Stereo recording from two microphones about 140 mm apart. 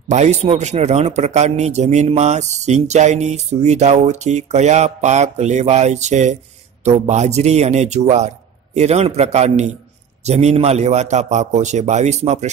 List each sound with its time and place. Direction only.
0.1 s a man's voice: 55° right (ahead or behind)